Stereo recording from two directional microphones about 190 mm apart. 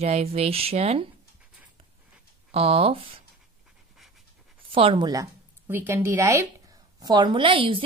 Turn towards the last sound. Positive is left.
turn(degrees=-25)  # may be behind; listen again after turning